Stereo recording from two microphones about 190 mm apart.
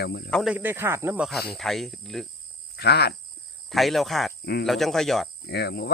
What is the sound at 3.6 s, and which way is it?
Speech, centre (ahead or behind).